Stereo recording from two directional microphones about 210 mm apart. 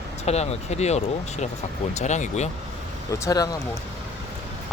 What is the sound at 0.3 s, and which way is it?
Speech, 30° left (ahead or behind).